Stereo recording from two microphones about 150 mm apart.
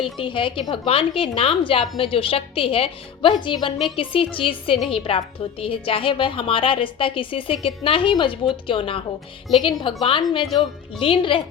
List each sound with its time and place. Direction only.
0.0 s a woman's voice: 35° left (ahead or behind)